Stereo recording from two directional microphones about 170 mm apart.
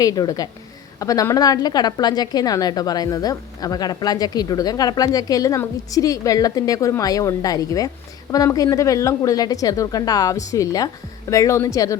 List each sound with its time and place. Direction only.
0.0 s a woman's voice: 20° left (ahead or behind)